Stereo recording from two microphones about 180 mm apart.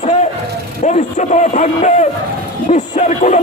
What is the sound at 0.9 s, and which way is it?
Speech, 40° left (ahead or behind).